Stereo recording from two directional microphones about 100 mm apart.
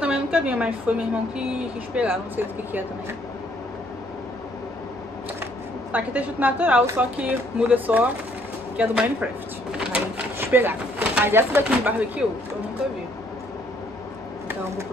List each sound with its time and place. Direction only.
0.0 s a woman's voice: 10° right (ahead or behind)
5.9 s speech: 15° right (ahead or behind)
10.4 s speech: 20° right (ahead or behind)